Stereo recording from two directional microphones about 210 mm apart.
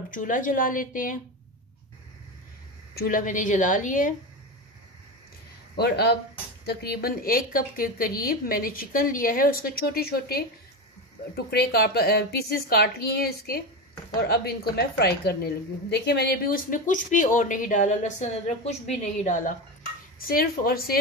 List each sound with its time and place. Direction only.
0.1 s a woman's voice: 40° left (ahead or behind)
3.0 s a woman's voice: 40° left (ahead or behind)
5.8 s a woman's voice: 50° left (ahead or behind)